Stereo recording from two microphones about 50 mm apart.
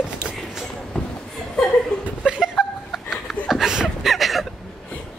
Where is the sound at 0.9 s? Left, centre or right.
Centre.